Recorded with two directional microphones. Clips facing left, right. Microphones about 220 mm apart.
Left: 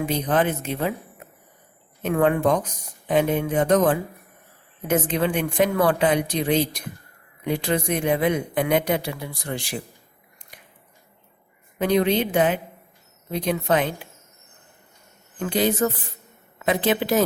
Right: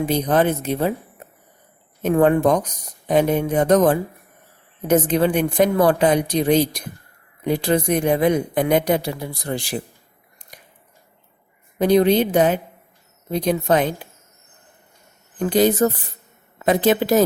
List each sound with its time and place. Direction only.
0.0 s a woman's voice: 35° right (ahead or behind)
2.0 s a woman's voice: 40° right (ahead or behind)
11.8 s a woman's voice: 40° right (ahead or behind)
15.4 s a woman's voice: 40° right (ahead or behind)